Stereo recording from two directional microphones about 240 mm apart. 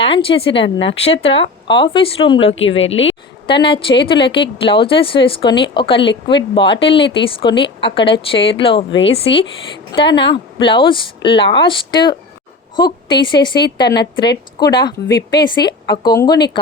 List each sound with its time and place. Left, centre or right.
0.0 s speech: left
2.6 s a woman's voice: left
3.0 s a woman's voice: left